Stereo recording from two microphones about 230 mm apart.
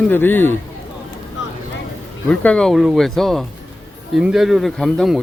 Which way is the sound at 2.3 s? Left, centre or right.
Centre.